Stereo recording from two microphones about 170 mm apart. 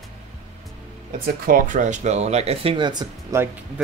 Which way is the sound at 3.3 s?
20° right (ahead or behind).